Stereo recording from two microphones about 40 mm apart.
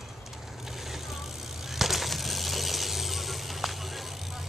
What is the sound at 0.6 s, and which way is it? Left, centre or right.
Vehicle, centre.